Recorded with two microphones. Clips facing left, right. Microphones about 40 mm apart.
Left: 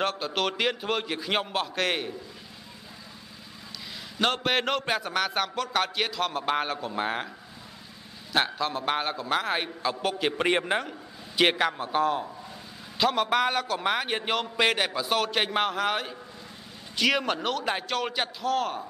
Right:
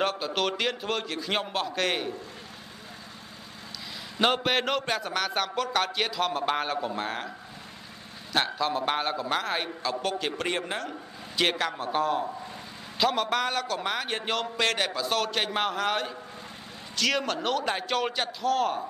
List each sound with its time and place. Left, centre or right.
0.0 s a man's voice: centre
4.2 s a man's voice: centre
8.3 s a man's voice: centre
11.8 s a man's voice: centre
17.3 s a man's voice: centre